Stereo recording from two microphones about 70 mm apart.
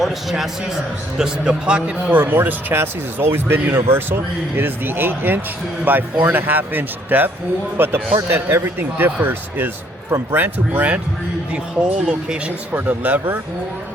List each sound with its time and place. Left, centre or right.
0.0 s a man's voice: centre
1.2 s speech: centre
2.0 s a man's voice: right
10.3 s speech: right